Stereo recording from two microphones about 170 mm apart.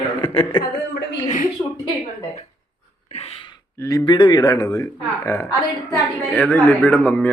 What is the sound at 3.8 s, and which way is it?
A woman's voice, 20° left (ahead or behind).